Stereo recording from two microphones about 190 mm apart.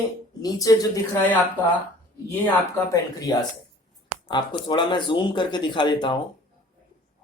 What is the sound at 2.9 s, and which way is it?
Speech, 20° left (ahead or behind).